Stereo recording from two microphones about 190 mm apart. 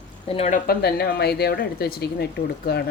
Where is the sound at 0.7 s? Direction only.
55° left (ahead or behind).